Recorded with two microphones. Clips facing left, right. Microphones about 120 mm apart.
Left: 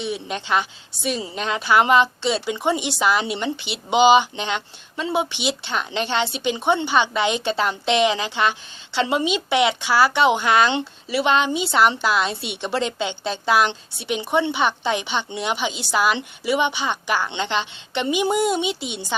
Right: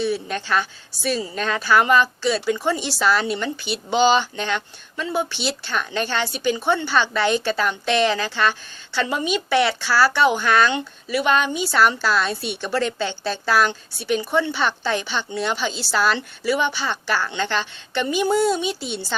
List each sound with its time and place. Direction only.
0.0 s a woman's voice: 20° left (ahead or behind)